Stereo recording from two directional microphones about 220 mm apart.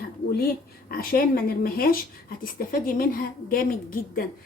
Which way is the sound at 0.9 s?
40° left (ahead or behind).